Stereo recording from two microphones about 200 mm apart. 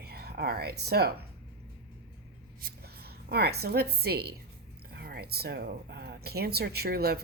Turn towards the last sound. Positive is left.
turn(degrees=-50)  # may be behind; listen again after turning